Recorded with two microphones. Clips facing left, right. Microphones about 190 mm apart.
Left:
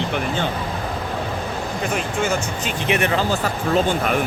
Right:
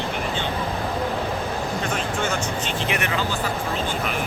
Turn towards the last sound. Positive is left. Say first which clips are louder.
# left 5 dB
turn(degrees=30)  # may be behind; listen again after turning